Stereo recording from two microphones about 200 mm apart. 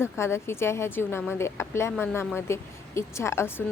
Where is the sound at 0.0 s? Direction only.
15° left (ahead or behind).